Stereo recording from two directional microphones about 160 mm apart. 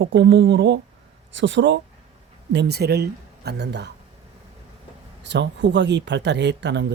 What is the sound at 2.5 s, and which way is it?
Speech, 90° right.